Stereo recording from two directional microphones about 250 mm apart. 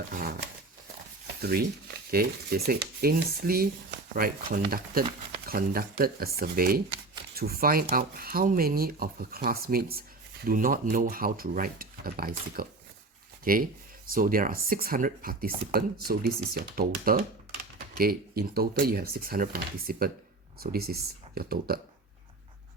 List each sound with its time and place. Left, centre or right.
0.1 s speech: right
1.4 s speech: right